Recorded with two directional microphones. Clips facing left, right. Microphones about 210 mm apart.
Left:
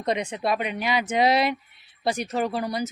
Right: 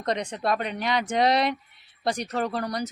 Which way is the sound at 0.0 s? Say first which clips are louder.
Left 2 dB; 5° left (ahead or behind).